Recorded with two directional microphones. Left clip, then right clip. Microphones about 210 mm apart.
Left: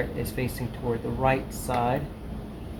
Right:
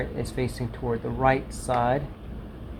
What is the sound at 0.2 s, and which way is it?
Speech, 40° right (ahead or behind).